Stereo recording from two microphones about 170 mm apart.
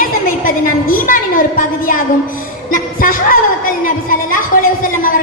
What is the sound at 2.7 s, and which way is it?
A woman's voice, 55° left (ahead or behind).